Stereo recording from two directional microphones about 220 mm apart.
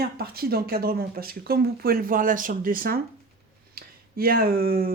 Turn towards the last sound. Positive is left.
turn(degrees=-40)  # may be behind; listen again after turning